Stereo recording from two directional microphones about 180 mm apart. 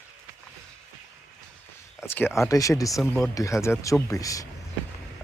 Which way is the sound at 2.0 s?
15° left (ahead or behind).